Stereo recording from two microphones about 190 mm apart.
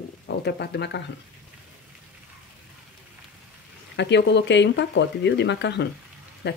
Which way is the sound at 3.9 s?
65° left (ahead or behind).